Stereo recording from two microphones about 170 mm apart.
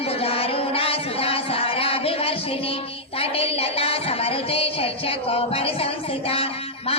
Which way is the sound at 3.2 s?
35° left (ahead or behind).